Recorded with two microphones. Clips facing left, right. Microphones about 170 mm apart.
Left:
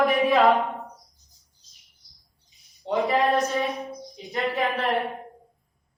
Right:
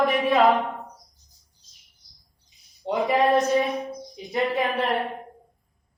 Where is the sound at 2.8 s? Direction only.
20° right (ahead or behind).